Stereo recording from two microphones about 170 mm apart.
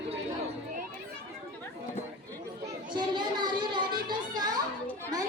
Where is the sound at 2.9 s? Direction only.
25° right (ahead or behind).